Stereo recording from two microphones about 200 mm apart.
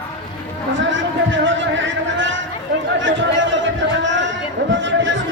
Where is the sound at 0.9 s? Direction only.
65° right (ahead or behind).